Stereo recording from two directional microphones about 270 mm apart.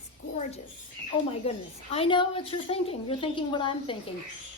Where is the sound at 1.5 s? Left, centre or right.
Left.